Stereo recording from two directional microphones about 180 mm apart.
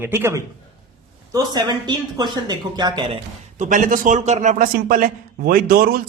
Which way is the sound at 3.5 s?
45° right (ahead or behind).